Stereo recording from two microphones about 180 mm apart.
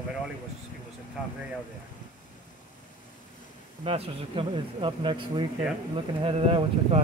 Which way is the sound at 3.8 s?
35° right (ahead or behind).